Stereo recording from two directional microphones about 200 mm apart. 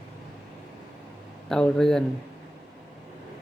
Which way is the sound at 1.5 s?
5° left (ahead or behind).